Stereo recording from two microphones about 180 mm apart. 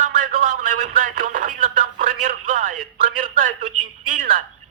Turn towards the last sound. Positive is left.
turn(degrees=-50)  # may be behind; listen again after turning